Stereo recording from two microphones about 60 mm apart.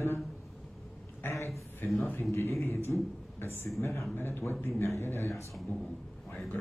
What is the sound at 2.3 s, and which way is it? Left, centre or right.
Speech, left.